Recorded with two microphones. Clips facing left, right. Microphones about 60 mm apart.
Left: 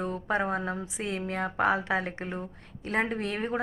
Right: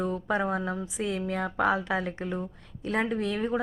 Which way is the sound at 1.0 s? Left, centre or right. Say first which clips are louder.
Right 2 dB; left.